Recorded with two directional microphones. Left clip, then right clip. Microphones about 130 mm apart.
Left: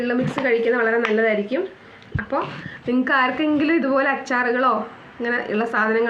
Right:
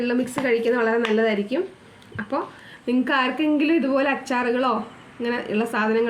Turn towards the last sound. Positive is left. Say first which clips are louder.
# left 2 dB
turn(degrees=-25)  # may be behind; listen again after turning